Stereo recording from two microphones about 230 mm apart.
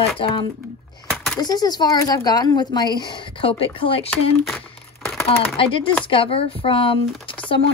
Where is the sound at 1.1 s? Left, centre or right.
Centre; by 4.1 s left.